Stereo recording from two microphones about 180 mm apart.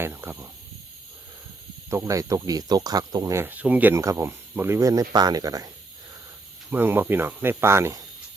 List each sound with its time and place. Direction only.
0.0 s speech: 15° right (ahead or behind)
1.9 s speech: 15° right (ahead or behind)